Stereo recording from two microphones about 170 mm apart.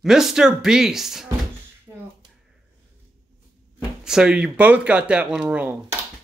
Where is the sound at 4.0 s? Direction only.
5° right (ahead or behind).